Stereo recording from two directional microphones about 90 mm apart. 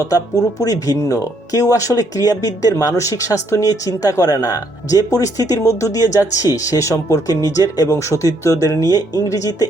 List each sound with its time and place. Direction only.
0.6 s speech: 40° left (ahead or behind)